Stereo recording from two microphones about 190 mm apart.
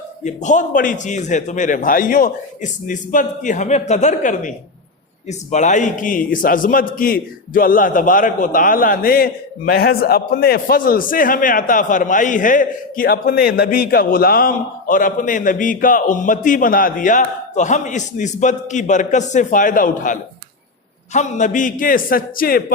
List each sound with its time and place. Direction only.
0.3 s a man's voice: 40° left (ahead or behind)